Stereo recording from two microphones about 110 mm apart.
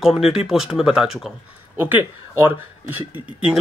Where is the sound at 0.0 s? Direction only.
5° right (ahead or behind).